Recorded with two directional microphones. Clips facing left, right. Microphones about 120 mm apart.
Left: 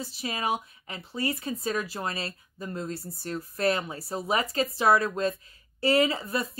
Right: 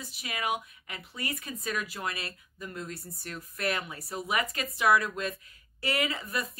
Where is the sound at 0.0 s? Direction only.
30° left (ahead or behind).